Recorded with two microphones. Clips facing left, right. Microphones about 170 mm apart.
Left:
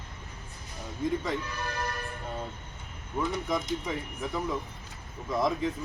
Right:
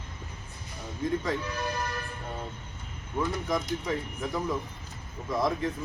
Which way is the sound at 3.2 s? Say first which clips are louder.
Right 1 dB; centre (ahead or behind).